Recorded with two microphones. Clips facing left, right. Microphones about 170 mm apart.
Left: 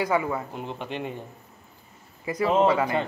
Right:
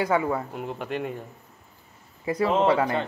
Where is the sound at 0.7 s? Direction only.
25° left (ahead or behind).